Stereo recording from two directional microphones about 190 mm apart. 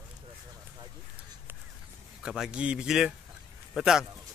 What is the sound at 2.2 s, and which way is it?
A man's voice, 5° right (ahead or behind).